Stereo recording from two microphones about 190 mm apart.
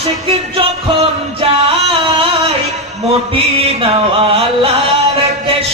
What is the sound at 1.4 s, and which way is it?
Music, 30° right (ahead or behind).